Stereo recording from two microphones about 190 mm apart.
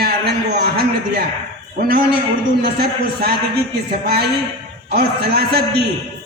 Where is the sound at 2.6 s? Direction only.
55° right (ahead or behind).